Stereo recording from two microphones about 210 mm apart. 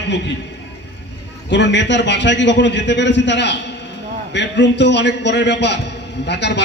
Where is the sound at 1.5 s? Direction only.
55° left (ahead or behind).